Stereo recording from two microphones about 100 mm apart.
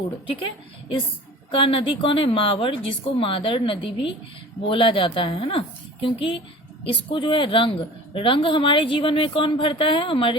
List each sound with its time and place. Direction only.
0.3 s a woman's voice: 60° left (ahead or behind)